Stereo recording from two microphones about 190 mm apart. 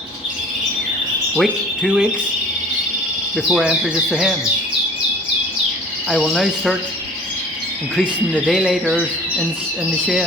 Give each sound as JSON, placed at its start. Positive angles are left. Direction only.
{"t": 1.4, "sound": "speech", "side_deg": -5}
{"t": 3.3, "sound": "speech", "side_deg": -5}
{"t": 6.1, "sound": "speech", "side_deg": 0}
{"t": 8.4, "sound": "speech", "side_deg": 0}